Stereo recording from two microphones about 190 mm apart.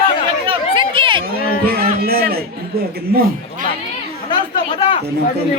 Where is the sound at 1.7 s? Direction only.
55° right (ahead or behind).